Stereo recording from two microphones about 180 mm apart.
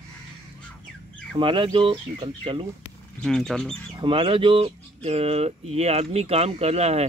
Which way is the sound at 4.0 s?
30° right (ahead or behind).